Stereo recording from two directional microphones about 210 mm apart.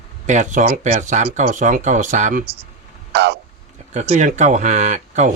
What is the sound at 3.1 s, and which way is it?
Speech, 50° right (ahead or behind).